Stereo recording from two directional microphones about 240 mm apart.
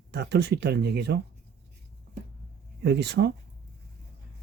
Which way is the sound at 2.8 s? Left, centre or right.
Right.